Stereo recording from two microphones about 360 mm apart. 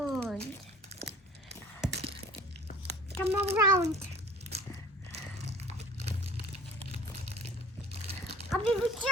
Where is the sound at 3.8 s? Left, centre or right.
Right.